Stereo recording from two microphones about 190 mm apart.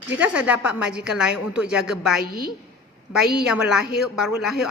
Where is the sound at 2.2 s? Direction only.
50° right (ahead or behind).